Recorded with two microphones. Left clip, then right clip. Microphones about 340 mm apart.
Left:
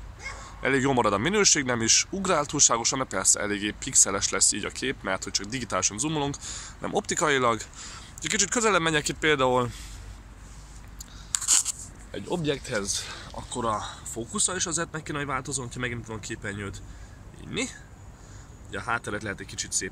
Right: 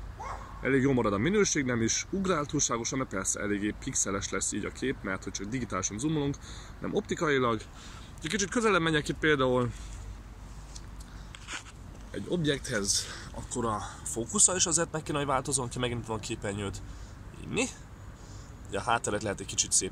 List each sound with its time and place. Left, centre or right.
0.7 s speech: centre
11.3 s a sound: left
12.9 s speech: centre